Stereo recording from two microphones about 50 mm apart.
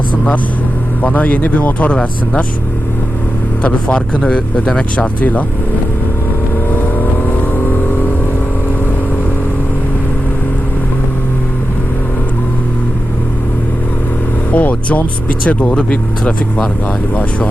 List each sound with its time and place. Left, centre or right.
1.0 s speech: left
3.6 s speech: left
5.2 s speech: left
6.7 s vehicle: left
14.5 s speech: left